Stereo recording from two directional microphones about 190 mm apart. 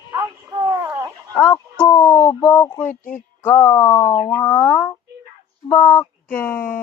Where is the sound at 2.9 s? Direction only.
45° left (ahead or behind).